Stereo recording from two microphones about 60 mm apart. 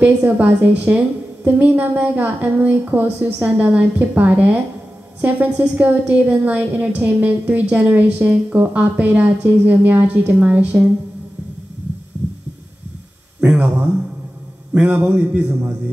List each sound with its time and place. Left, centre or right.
0.0 s a woman's voice: right
13.4 s a woman's voice: right